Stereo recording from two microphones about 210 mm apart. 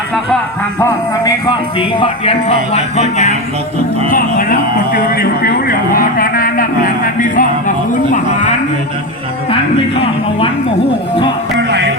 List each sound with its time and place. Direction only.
0.8 s music: 15° left (ahead or behind)
2.7 s a man's voice: 30° left (ahead or behind)
9.5 s music: 25° left (ahead or behind)